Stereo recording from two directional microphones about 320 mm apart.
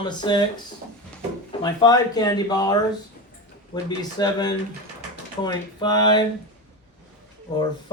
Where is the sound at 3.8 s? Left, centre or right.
Centre.